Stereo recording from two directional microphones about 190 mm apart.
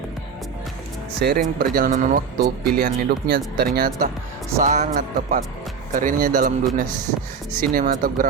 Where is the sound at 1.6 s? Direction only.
45° right (ahead or behind).